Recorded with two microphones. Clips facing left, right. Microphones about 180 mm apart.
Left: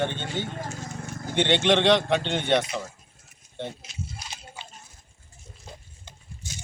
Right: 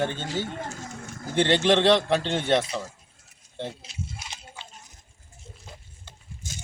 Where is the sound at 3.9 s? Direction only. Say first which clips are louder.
Right 1 dB; 30° right (ahead or behind).